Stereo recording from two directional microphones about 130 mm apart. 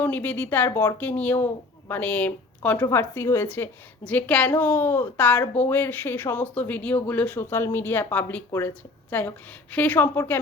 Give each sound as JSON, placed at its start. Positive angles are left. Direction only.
{"t": 0.0, "sound": "a woman's voice", "side_deg": 15}